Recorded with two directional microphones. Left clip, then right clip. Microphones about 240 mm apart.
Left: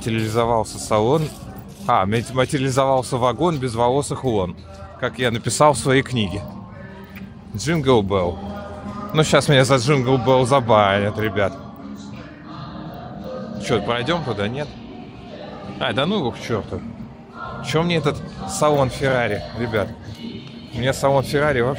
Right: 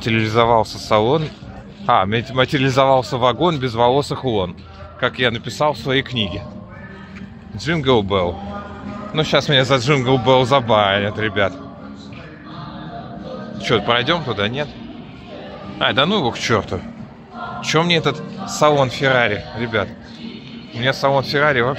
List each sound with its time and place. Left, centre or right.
0.0 s speech: centre
5.3 s speech: left
7.5 s speech: centre
13.6 s a man's voice: centre
15.8 s a man's voice: centre